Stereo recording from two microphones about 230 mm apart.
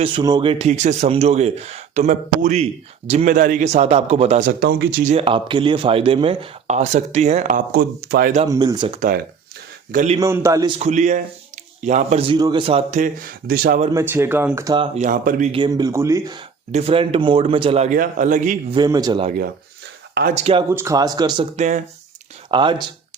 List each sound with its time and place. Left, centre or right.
0.0 s a man's voice: centre; by 5.1 s right
5.1 s speech: right
8.4 s speech: centre
9.0 s a man's voice: right
10.2 s speech: centre
10.8 s a man's voice: right
13.9 s speech: centre
14.9 s speech: right
18.7 s speech: centre
20.3 s speech: right